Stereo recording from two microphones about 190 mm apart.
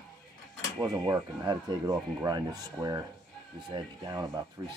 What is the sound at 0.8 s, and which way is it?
Speech, 20° right (ahead or behind).